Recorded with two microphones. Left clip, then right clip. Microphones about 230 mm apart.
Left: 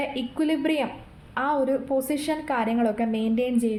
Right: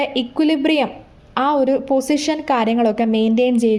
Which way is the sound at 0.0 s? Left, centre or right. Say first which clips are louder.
Right 8 dB; right.